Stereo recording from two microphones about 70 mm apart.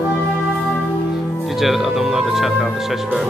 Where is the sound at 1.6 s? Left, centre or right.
Centre.